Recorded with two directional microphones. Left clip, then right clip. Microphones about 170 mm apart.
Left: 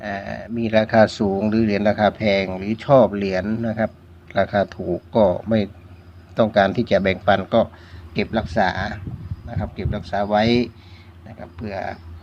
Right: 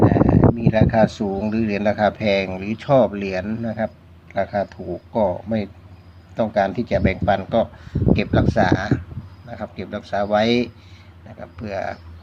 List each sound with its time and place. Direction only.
0.0 s speech: 15° left (ahead or behind)
8.1 s speech: centre (ahead or behind)